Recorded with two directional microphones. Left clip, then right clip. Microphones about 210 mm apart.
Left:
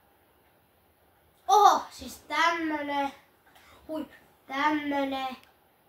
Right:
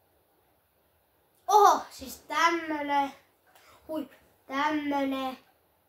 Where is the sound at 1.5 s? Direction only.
50° right (ahead or behind).